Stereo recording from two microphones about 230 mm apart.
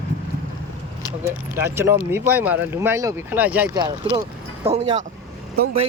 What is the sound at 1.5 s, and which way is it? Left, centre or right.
Speech, centre.